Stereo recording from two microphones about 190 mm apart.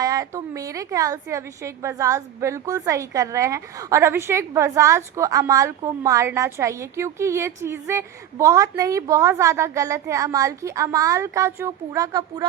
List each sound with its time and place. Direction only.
0.0 s a woman's voice: 20° right (ahead or behind)